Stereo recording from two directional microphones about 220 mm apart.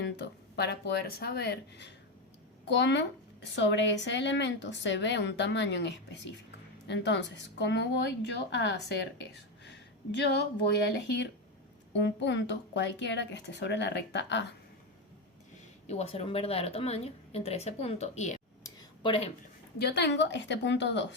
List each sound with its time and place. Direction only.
0.0 s a woman's voice: 50° left (ahead or behind)
10.2 s a woman's voice: 50° left (ahead or behind)
15.9 s a woman's voice: 30° left (ahead or behind)
18.6 s a sound: 25° left (ahead or behind)
19.8 s a woman's voice: 50° left (ahead or behind)